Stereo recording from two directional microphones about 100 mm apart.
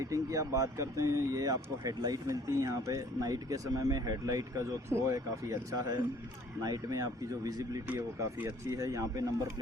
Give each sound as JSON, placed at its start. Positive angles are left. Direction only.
{"t": 0.0, "sound": "speech", "side_deg": -30}
{"t": 7.9, "sound": "speech", "side_deg": -25}